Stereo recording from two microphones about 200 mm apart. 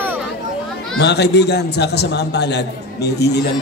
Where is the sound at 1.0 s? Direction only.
55° left (ahead or behind).